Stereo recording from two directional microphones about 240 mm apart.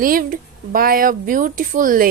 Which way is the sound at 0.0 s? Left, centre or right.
Right.